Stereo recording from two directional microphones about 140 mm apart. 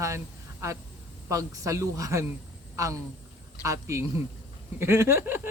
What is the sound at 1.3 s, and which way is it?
Speech, 25° right (ahead or behind).